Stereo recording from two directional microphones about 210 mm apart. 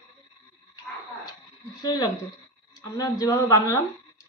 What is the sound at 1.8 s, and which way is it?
Speech, 20° left (ahead or behind).